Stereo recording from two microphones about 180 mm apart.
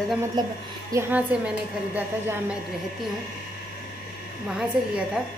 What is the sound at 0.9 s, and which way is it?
A woman's voice, 10° right (ahead or behind).